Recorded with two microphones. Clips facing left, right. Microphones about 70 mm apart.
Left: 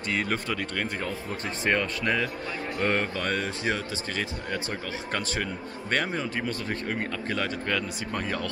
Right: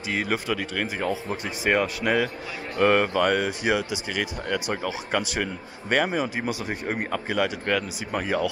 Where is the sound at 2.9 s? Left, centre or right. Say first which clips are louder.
Right 8 dB; centre.